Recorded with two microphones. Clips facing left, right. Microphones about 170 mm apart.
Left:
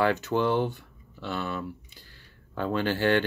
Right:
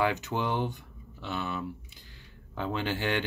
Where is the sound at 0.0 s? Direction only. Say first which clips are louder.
Left 4 dB; 15° right (ahead or behind).